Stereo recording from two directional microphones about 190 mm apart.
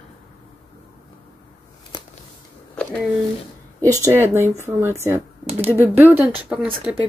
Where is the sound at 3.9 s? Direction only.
15° right (ahead or behind).